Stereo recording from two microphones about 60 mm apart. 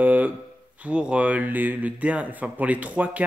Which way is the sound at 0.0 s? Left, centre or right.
Right.